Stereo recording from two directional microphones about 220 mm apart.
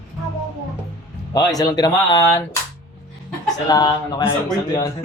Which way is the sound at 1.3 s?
15° left (ahead or behind).